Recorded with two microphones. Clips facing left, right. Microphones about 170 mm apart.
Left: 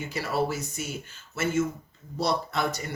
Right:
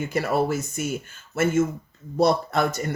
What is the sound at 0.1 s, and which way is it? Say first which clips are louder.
Speech: right 4 dB; 50° right (ahead or behind).